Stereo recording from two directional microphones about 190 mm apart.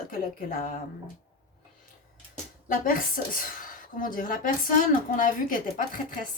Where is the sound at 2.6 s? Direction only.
45° left (ahead or behind).